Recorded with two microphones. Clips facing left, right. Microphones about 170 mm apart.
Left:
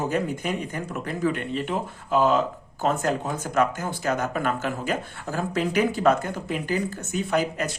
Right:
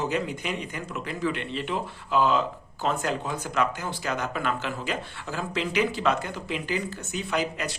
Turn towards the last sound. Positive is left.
turn(degrees=50)  # may be behind; listen again after turning